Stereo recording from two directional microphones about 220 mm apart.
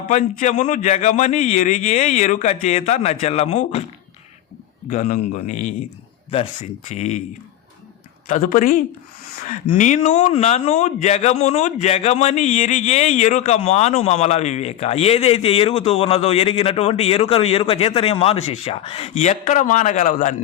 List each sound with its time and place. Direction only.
0.1 s a man's voice: 30° left (ahead or behind)
4.9 s a man's voice: 35° left (ahead or behind)
8.3 s a man's voice: 35° left (ahead or behind)